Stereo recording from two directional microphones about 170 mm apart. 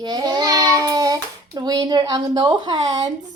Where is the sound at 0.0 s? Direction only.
25° right (ahead or behind).